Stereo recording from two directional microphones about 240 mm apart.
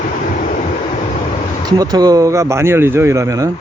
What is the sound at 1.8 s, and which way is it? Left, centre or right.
Speech, centre.